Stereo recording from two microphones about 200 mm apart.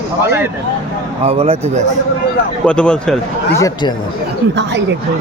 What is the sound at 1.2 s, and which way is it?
Speech, 30° right (ahead or behind).